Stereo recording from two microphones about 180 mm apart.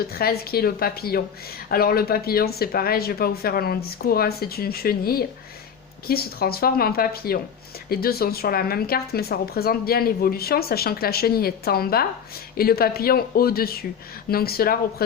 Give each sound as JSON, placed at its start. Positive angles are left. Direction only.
{"t": 0.1, "sound": "speech", "side_deg": 60}